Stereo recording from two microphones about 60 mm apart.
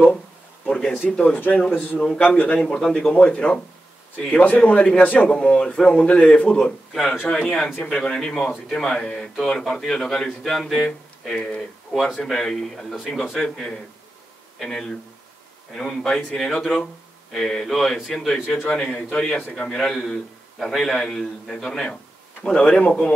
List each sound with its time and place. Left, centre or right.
0.7 s a sound: centre
1.1 s a man's voice: centre
1.7 s a man's voice: left
2.6 s a man's voice: centre
6.9 s a man's voice: centre
7.8 s a man's voice: centre